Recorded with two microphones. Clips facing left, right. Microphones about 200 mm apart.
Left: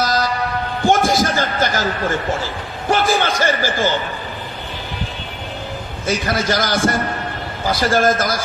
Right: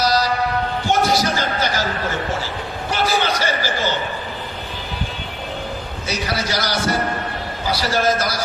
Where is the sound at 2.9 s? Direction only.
50° left (ahead or behind).